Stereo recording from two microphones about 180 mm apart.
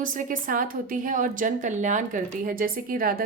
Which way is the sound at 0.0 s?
50° right (ahead or behind).